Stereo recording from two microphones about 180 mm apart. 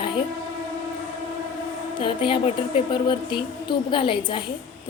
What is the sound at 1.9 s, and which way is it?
A woman's voice, 25° left (ahead or behind).